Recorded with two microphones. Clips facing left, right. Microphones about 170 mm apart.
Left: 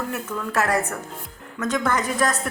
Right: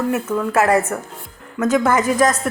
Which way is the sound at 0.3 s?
35° right (ahead or behind).